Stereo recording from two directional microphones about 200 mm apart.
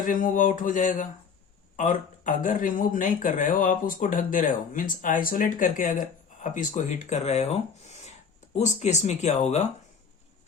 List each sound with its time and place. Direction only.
0.0 s speech: 40° left (ahead or behind)